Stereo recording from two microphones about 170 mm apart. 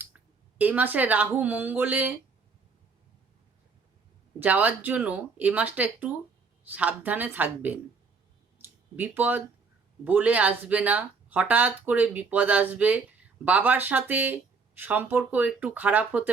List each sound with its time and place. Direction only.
0.6 s speech: 10° right (ahead or behind)
4.4 s speech: 10° right (ahead or behind)
8.5 s a sound: 10° right (ahead or behind)
10.0 s speech: 10° right (ahead or behind)